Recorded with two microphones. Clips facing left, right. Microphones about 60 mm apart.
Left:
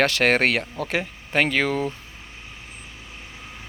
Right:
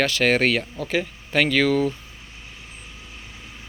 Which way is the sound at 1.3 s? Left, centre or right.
Left.